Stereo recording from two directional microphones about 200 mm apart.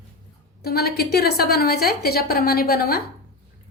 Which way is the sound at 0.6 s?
50° left (ahead or behind).